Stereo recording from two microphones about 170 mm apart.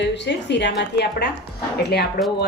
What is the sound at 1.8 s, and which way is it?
Speech, 70° left (ahead or behind).